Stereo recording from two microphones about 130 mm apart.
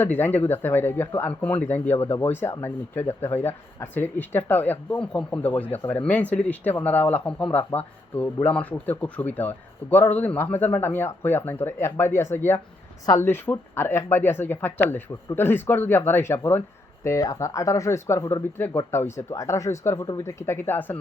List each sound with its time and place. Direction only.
0.0 s speech: 15° left (ahead or behind)